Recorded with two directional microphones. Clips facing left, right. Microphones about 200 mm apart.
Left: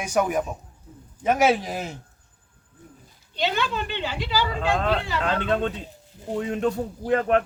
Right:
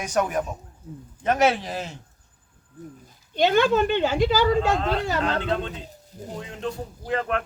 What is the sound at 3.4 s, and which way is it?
Speech, 50° right (ahead or behind).